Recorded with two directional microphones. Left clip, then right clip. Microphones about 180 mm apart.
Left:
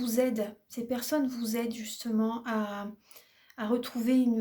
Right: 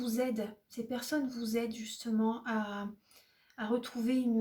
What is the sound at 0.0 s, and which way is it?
Speech, 40° left (ahead or behind).